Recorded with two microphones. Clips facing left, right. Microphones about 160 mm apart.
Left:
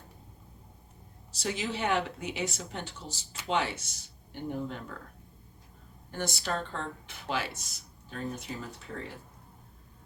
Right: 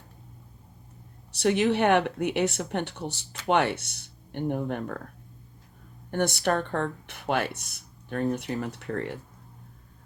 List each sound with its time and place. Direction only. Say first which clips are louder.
1.3 s speech: right 11 dB; 65° right (ahead or behind)
6.1 s speech: right 9 dB; 65° right (ahead or behind)